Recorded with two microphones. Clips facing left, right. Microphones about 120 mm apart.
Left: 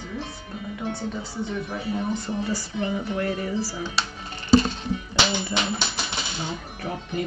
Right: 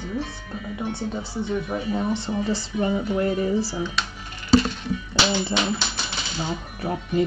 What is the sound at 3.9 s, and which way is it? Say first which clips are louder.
Music: left 1 dB; 30° left (ahead or behind).